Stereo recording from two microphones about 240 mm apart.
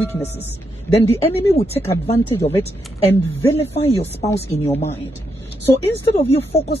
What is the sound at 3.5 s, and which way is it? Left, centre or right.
Speech, left.